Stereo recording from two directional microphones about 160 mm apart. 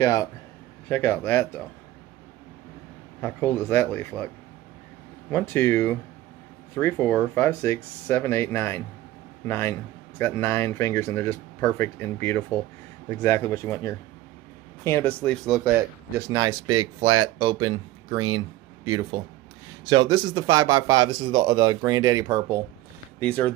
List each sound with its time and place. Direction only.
0.0 s a man's voice: 20° left (ahead or behind)
3.2 s speech: 15° left (ahead or behind)
5.3 s speech: 15° left (ahead or behind)
16.2 s speech: 20° right (ahead or behind)
19.9 s speech: 25° right (ahead or behind)
23.1 s speech: 10° left (ahead or behind)